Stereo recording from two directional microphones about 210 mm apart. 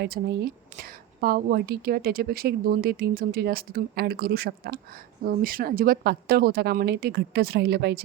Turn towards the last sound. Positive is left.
turn(degrees=-50)  # may be behind; listen again after turning